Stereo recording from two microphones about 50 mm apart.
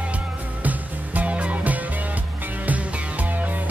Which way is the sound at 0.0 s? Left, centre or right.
Right.